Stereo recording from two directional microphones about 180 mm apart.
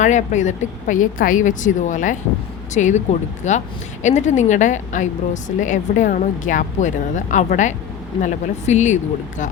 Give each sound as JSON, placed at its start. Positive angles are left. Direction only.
{"t": 0.0, "sound": "a woman's voice", "side_deg": 40}